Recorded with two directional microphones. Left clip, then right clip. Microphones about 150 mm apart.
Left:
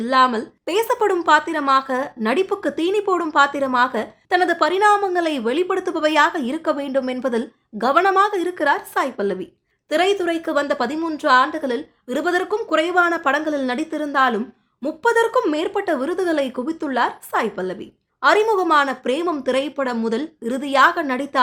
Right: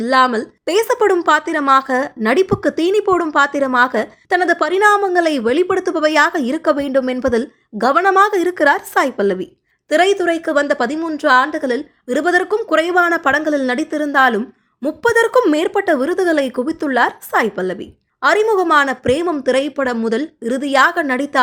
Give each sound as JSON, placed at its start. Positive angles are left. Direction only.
{"t": 0.0, "sound": "a woman's voice", "side_deg": -30}